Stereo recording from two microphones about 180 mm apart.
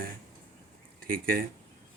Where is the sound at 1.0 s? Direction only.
55° right (ahead or behind).